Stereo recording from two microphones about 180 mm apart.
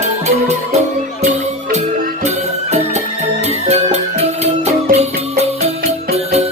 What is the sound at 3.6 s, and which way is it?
Music, 35° right (ahead or behind).